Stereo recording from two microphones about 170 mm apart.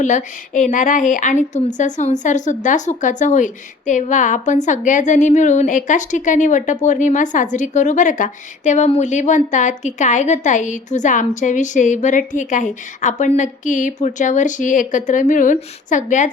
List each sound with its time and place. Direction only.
0.0 s a woman's voice: 50° left (ahead or behind)